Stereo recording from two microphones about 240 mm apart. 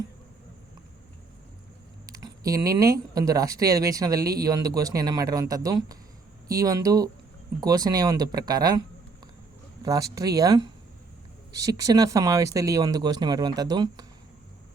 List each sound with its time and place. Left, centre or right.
2.1 s speech: centre
9.8 s speech: centre